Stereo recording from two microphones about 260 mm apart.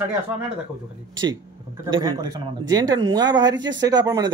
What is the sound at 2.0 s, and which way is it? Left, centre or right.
Speech, centre.